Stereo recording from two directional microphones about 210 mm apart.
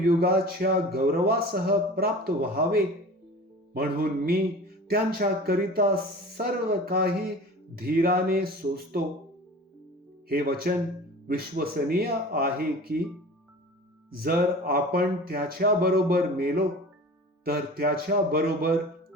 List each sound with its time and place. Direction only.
0.0 s a man's voice: 45° right (ahead or behind)
10.2 s a man's voice: 45° right (ahead or behind)
14.1 s a man's voice: 45° right (ahead or behind)